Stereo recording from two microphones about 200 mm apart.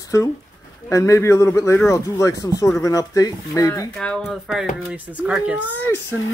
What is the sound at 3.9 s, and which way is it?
Speech, 5° left (ahead or behind).